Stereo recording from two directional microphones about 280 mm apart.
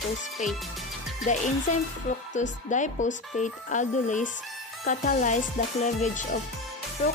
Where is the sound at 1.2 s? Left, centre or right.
Left.